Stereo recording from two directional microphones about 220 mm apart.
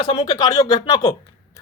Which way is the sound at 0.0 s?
20° left (ahead or behind).